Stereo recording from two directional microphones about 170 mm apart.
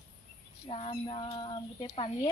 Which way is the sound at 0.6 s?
35° left (ahead or behind).